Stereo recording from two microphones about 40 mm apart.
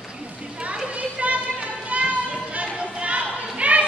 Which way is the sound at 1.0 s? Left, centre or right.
Right.